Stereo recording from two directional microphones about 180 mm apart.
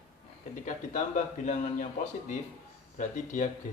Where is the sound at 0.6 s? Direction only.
40° left (ahead or behind).